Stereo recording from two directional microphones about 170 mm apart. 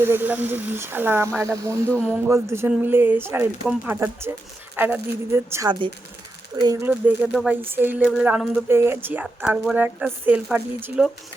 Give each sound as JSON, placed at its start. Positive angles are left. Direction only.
{"t": 0.0, "sound": "speech", "side_deg": -10}
{"t": 1.9, "sound": "speech", "side_deg": 10}
{"t": 2.2, "sound": "speech", "side_deg": -15}
{"t": 7.3, "sound": "speech", "side_deg": -5}